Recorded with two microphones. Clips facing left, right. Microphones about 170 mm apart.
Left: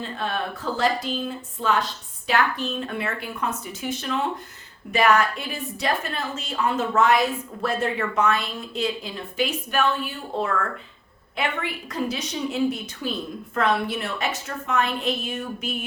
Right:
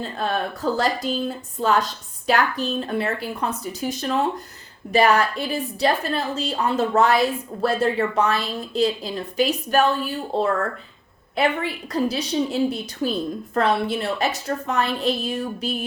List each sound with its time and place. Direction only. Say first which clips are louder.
0.0 s a woman's voice: right 3 dB; 40° right (ahead or behind)